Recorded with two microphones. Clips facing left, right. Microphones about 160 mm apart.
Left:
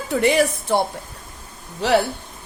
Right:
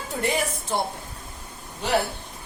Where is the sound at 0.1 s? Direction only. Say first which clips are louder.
Left 8 dB; 80° left.